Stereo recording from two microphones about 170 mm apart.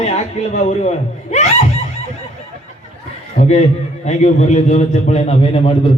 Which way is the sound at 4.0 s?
40° left (ahead or behind).